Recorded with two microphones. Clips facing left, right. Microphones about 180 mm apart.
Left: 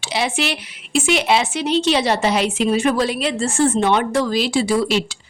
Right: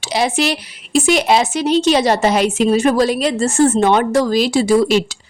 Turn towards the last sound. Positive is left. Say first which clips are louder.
# right 5 dB
turn(degrees=-45)  # may be behind; listen again after turning